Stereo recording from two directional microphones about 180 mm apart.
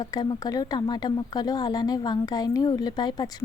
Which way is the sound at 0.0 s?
20° left (ahead or behind).